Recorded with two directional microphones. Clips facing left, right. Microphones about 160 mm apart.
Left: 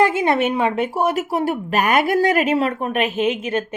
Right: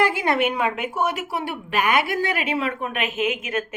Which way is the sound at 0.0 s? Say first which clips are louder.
Left 4 dB; 25° left (ahead or behind).